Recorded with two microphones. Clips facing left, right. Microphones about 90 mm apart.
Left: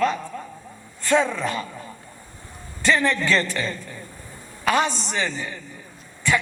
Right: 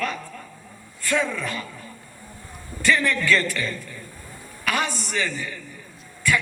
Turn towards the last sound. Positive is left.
turn(degrees=25)  # may be behind; listen again after turning